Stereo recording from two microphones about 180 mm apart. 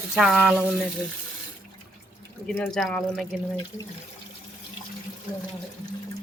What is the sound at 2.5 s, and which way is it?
Speech, 5° left (ahead or behind).